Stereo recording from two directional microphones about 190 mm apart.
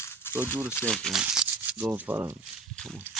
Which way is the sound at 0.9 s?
Centre (ahead or behind).